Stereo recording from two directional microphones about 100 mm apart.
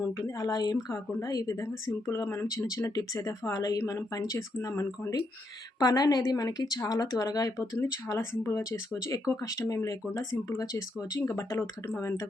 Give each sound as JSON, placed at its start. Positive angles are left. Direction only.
{"t": 0.3, "sound": "speech", "side_deg": 40}
{"t": 4.5, "sound": "speech", "side_deg": 25}
{"t": 5.8, "sound": "speech", "side_deg": 40}